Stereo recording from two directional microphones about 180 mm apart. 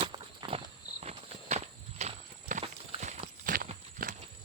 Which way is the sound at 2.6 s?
35° right (ahead or behind).